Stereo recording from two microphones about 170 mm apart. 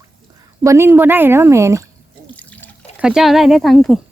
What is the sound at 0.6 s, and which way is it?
Speech, 15° right (ahead or behind).